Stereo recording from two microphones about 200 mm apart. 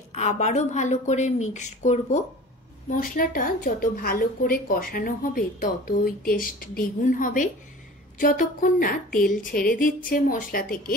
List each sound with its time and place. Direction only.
0.1 s a woman's voice: 35° left (ahead or behind)